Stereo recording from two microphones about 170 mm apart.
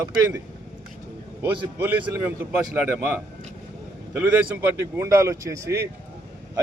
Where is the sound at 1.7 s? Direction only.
10° right (ahead or behind).